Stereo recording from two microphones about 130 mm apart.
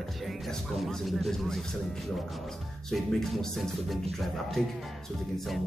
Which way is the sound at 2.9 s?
Centre (ahead or behind).